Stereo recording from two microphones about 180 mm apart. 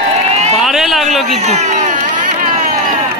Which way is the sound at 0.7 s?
Centre (ahead or behind).